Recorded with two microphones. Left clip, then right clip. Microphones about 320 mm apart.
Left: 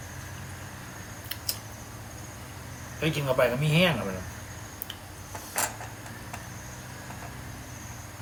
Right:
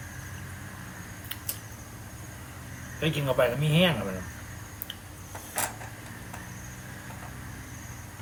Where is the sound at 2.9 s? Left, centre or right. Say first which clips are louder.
Even; centre.